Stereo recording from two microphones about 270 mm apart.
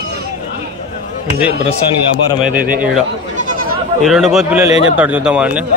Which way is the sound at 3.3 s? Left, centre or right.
Right.